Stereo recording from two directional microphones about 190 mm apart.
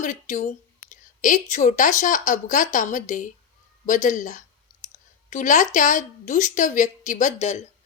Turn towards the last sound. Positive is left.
turn(degrees=35)  # may be behind; listen again after turning